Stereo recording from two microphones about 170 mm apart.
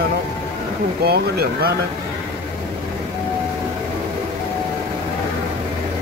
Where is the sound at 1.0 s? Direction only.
65° right (ahead or behind).